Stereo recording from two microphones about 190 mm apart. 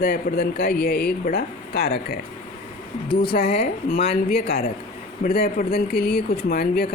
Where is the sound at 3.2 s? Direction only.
55° left (ahead or behind).